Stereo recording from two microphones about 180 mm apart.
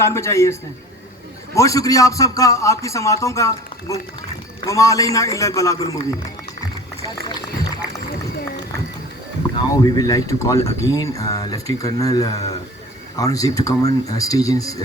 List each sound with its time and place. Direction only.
0.0 s a man's voice: 15° left (ahead or behind)
1.5 s a man's voice: 20° left (ahead or behind)
9.8 s speech: 20° left (ahead or behind)